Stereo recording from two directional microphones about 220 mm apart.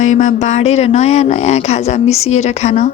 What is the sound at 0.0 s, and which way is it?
Speech, 35° left (ahead or behind).